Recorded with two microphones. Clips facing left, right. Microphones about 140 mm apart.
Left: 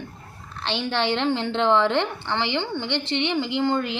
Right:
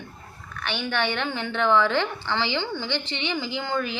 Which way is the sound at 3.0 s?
70° left (ahead or behind).